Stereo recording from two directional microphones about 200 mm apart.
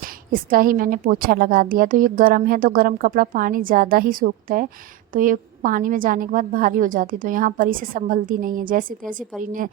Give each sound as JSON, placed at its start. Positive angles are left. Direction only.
{"t": 0.0, "sound": "a woman's voice", "side_deg": -45}